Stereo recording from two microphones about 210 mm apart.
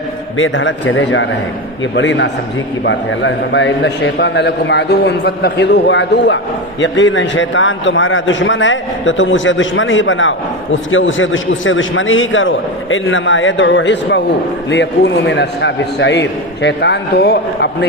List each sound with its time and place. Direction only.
0.3 s a man's voice: 65° left (ahead or behind)